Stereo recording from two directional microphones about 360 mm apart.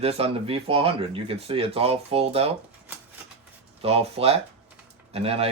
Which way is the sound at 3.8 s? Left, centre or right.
Centre.